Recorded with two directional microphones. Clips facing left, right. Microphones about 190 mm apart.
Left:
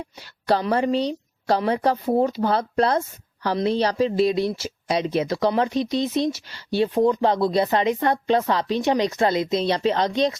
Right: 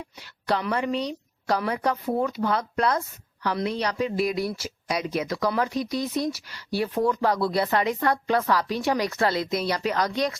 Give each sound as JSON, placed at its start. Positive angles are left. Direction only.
{"t": 0.2, "sound": "a woman's voice", "side_deg": 35}